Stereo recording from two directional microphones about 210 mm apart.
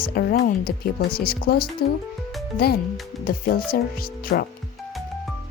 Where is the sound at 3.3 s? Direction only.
45° left (ahead or behind).